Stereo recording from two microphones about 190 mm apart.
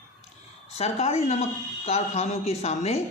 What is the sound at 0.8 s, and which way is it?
A woman's voice, 35° left (ahead or behind).